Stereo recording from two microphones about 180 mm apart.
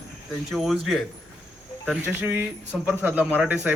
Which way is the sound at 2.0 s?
10° right (ahead or behind).